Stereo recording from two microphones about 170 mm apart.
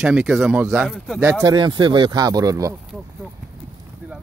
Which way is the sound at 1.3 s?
15° right (ahead or behind).